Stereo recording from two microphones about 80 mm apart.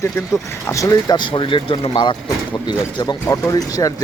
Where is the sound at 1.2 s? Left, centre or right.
Left.